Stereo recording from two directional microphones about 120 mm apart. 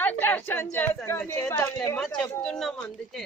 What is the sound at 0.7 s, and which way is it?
A woman's voice, 15° left (ahead or behind).